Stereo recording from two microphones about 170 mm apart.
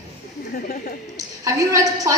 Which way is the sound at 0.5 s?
60° left (ahead or behind).